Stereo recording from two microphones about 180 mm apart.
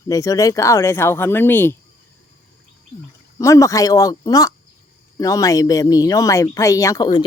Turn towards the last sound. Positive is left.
turn(degrees=20)  # may be behind; listen again after turning